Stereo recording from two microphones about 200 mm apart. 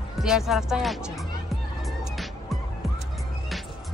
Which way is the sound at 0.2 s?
Centre (ahead or behind).